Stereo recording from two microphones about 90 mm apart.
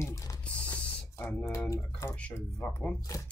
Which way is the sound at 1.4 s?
30° left (ahead or behind).